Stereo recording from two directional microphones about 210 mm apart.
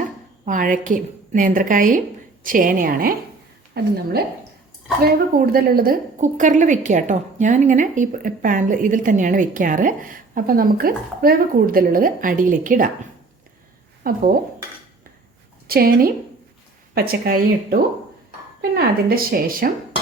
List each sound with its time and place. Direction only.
0.4 s a woman's voice: 40° right (ahead or behind)
5.0 s a woman's voice: 45° right (ahead or behind)
14.0 s a woman's voice: 45° right (ahead or behind)
15.6 s a woman's voice: 45° right (ahead or behind)